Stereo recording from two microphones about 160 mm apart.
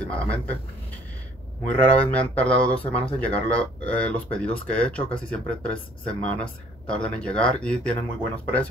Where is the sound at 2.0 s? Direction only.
10° left (ahead or behind).